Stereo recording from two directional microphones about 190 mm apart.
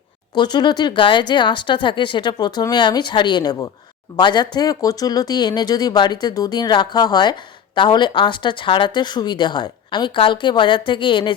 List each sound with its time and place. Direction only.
0.3 s speech: 25° left (ahead or behind)